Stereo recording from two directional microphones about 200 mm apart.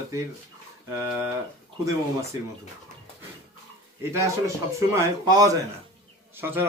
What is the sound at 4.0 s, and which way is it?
Speech, 15° right (ahead or behind).